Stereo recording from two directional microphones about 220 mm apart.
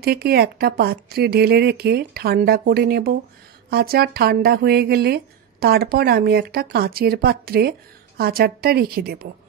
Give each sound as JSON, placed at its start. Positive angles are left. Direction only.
{"t": 0.0, "sound": "speech", "side_deg": -45}